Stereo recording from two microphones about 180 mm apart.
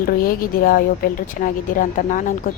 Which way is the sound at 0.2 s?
55° left (ahead or behind).